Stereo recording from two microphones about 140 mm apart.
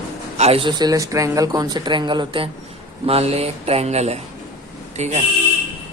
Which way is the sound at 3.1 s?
45° right (ahead or behind).